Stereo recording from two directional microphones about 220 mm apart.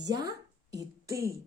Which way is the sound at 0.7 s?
15° right (ahead or behind).